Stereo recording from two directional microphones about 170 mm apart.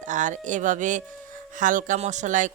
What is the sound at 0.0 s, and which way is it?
Speech, 45° right (ahead or behind).